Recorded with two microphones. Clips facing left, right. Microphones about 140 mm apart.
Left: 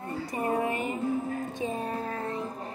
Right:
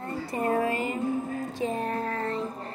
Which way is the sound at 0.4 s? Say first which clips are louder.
Right 2 dB; 15° left (ahead or behind).